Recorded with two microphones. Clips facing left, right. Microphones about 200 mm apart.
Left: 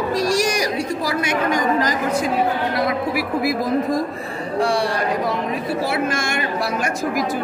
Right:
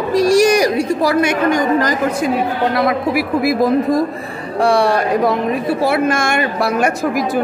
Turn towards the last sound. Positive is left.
turn(degrees=-60)  # may be behind; listen again after turning